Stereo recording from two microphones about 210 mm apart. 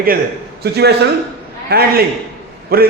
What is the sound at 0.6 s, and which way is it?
A man's voice, 50° right (ahead or behind).